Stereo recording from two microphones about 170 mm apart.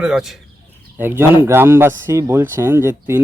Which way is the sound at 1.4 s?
15° right (ahead or behind).